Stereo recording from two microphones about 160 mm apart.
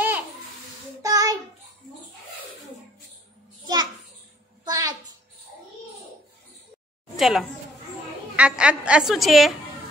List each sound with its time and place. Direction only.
1.0 s child singing: 20° right (ahead or behind)
3.6 s a sound: 25° right (ahead or behind)
7.2 s a woman's voice: centre (ahead or behind)